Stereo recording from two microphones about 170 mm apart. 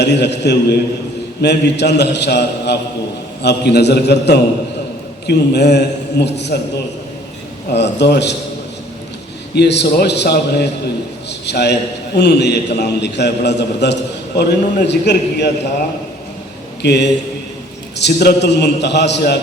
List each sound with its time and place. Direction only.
0.0 s a man's voice: 85° left
7.7 s a man's voice: 85° left
9.6 s a man's voice: 85° left
16.8 s a man's voice: 85° left